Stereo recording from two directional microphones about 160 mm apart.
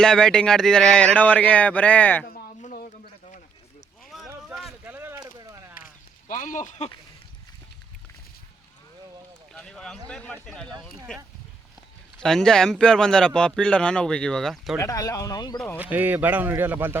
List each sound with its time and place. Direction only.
0.0 s speech: 5° left (ahead or behind)
2.2 s a sound: 55° left (ahead or behind)
4.4 s a sound: 5° right (ahead or behind); by 5.7 s 20° right (ahead or behind)
5.7 s a sound: 60° left (ahead or behind)
9.5 s run: 5° left (ahead or behind)
10.1 s speech: 5° left (ahead or behind)
14.8 s speech: 20° left (ahead or behind)
15.5 s speech: 10° left (ahead or behind)
15.8 s a man's voice: 10° right (ahead or behind)